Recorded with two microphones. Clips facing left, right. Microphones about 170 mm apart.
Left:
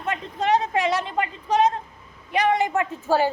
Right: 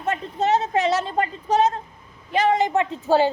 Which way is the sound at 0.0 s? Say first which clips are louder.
Right 2 dB; 30° right (ahead or behind).